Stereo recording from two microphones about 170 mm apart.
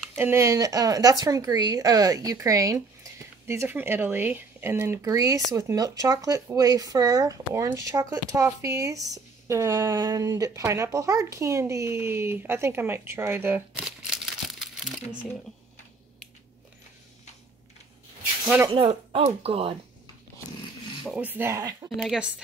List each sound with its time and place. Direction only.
0.2 s speech: 15° right (ahead or behind)
18.7 s speech: 30° right (ahead or behind)
21.0 s speech: 10° right (ahead or behind)
21.8 s speech: centre (ahead or behind)